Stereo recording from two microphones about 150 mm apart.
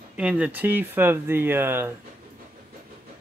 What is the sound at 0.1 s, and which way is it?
Speech, 10° right (ahead or behind).